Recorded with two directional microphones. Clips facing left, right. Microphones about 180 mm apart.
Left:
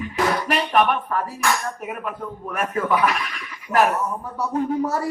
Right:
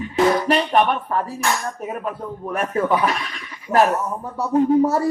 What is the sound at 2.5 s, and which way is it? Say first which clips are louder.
Speech: right 2 dB; 30° right (ahead or behind).